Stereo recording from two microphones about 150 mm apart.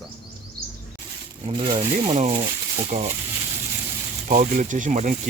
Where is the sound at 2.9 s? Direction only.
50° right (ahead or behind).